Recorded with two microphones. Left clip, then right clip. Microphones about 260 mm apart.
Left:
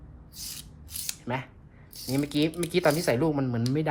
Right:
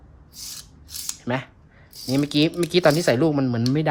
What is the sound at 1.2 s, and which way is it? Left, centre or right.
Speech, right.